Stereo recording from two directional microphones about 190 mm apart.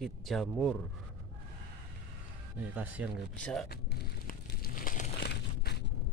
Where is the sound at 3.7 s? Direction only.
55° left (ahead or behind).